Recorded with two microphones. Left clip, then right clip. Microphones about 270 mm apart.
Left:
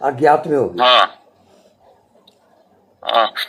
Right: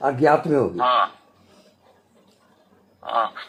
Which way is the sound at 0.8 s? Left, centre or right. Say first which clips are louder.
Left 9 dB; left.